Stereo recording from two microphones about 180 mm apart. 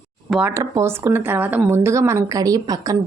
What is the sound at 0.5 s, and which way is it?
A woman's voice, 15° right (ahead or behind).